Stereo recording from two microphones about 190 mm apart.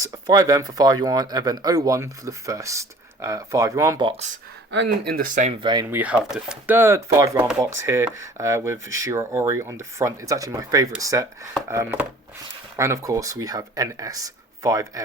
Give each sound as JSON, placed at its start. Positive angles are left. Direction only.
{"t": 0.0, "sound": "speech", "side_deg": -20}
{"t": 4.7, "sound": "speech", "side_deg": -65}
{"t": 5.9, "sound": "speech", "side_deg": -5}